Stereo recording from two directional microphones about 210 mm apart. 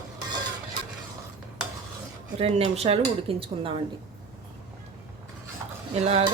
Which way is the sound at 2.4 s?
30° right (ahead or behind).